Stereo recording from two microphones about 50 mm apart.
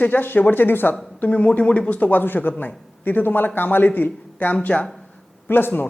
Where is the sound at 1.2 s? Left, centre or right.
Left.